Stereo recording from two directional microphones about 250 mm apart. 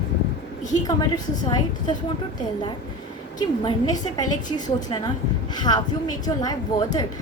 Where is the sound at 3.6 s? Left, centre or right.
Centre.